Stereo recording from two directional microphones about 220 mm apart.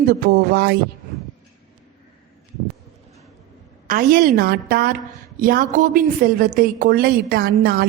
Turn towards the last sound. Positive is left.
turn(degrees=-45)  # may be behind; listen again after turning